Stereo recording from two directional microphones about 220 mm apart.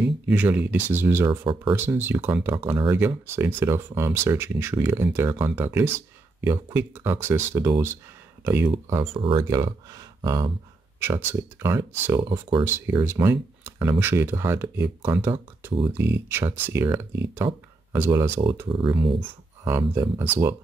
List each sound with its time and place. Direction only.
0.0 s speech: 5° right (ahead or behind)
1.8 s speech: 10° right (ahead or behind)
9.0 s speech: 25° right (ahead or behind)
12.3 s speech: 25° right (ahead or behind)
12.6 s speech: 10° right (ahead or behind)
18.7 s speech: 20° right (ahead or behind)
19.6 s speech: 10° right (ahead or behind)